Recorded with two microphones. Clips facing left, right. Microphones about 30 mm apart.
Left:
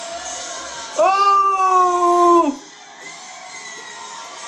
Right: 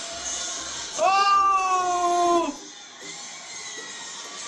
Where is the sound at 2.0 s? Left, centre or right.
Left.